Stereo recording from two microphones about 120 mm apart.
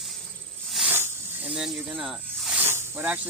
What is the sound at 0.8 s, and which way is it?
Hiss, 15° right (ahead or behind).